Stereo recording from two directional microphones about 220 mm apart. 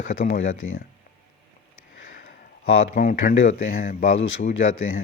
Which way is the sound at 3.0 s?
35° left (ahead or behind).